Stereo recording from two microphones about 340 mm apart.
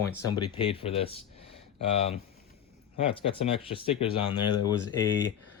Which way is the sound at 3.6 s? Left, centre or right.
Centre.